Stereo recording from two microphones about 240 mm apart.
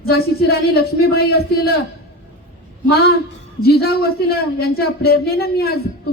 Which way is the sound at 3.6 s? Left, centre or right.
Left.